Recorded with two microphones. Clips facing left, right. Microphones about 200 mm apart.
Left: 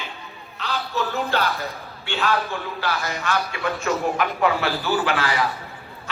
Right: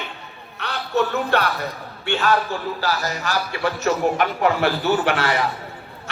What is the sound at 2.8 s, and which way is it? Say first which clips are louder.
Speech: right 2 dB; 40° right (ahead or behind).